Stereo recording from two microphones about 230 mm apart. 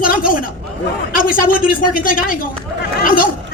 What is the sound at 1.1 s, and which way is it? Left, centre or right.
A man's voice, left.